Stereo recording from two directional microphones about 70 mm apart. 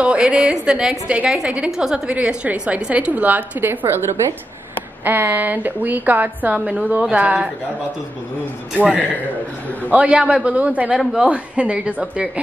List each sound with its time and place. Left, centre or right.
0.0 s a woman's voice: centre
6.5 s a woman's voice: centre
9.8 s a woman's voice: centre